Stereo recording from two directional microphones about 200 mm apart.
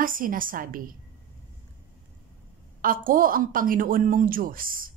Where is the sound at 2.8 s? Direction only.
45° right (ahead or behind).